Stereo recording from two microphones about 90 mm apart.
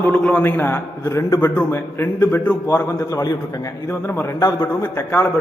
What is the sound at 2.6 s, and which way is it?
A man's voice, 40° left (ahead or behind).